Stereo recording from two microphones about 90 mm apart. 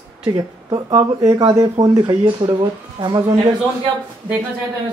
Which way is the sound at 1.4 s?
40° right (ahead or behind).